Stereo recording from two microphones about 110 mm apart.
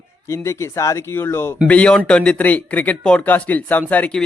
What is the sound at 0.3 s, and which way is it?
Speech, 25° left (ahead or behind).